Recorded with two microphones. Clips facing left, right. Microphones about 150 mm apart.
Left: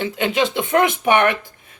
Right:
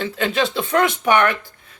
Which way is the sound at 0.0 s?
15° left (ahead or behind).